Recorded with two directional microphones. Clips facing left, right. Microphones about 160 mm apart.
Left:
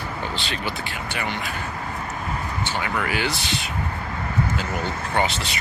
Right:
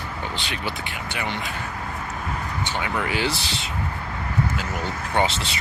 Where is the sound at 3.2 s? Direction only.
30° right (ahead or behind).